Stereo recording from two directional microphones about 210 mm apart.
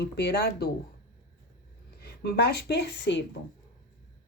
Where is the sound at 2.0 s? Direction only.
50° left (ahead or behind).